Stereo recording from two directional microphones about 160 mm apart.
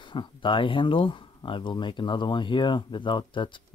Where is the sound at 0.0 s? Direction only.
30° left (ahead or behind).